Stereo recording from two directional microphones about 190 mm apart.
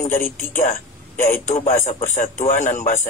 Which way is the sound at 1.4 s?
35° left (ahead or behind).